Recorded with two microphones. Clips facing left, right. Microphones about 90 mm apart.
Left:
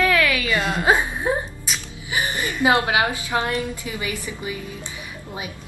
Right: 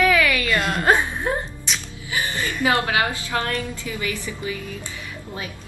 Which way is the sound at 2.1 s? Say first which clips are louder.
Left 1 dB; 20° left (ahead or behind).